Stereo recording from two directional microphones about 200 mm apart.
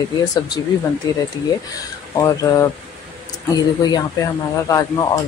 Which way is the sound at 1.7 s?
15° left (ahead or behind).